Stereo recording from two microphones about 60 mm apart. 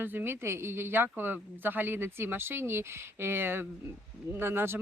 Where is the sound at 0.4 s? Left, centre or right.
Right.